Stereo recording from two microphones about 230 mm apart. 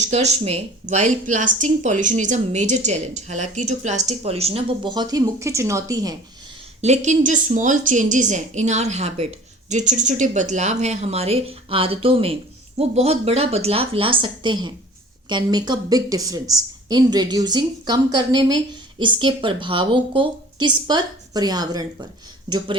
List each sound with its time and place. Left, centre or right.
0.1 s speech: right
6.8 s a woman's voice: right